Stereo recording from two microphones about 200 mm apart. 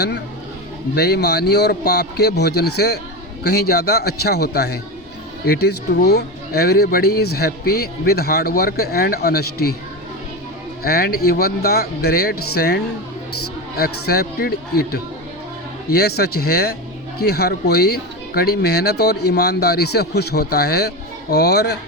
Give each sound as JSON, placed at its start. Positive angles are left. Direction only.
{"t": 0.9, "sound": "speech", "side_deg": 55}
{"t": 10.8, "sound": "speech", "side_deg": 50}